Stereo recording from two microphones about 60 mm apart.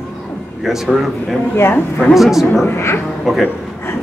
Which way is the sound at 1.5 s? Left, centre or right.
Left.